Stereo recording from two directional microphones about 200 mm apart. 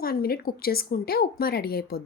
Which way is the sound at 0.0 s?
50° left (ahead or behind).